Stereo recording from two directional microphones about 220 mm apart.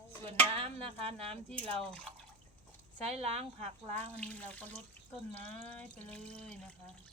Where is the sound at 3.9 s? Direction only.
5° left (ahead or behind).